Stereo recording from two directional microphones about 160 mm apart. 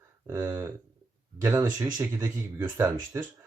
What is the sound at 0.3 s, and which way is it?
Speech, 20° right (ahead or behind).